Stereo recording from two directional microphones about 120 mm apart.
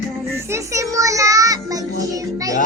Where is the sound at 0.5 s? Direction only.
25° right (ahead or behind).